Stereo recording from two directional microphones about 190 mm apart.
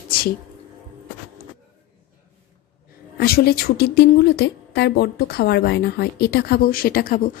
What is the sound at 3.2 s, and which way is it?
A woman's voice, 55° left (ahead or behind).